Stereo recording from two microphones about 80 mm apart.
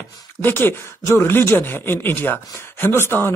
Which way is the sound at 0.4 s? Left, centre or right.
Left.